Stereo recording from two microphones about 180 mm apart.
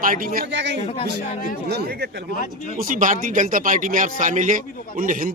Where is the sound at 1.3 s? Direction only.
50° left (ahead or behind).